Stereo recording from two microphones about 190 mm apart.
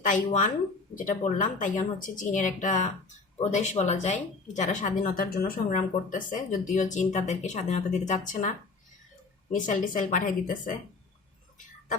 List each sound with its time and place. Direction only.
0.0 s speech: 40° left (ahead or behind)